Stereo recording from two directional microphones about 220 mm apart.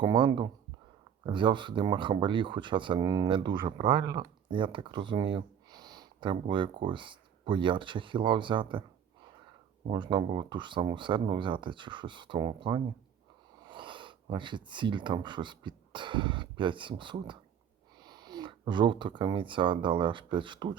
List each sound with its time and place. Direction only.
0.0 s speech: 20° right (ahead or behind)
9.8 s speech: 20° right (ahead or behind)